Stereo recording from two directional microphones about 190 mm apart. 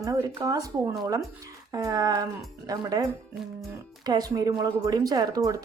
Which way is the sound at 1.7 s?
20° right (ahead or behind).